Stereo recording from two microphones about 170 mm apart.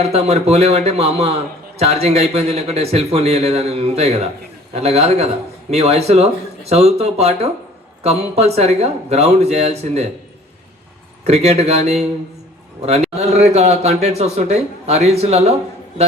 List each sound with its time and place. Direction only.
0.0 s a man's voice: 40° right (ahead or behind)
11.3 s a man's voice: 40° right (ahead or behind)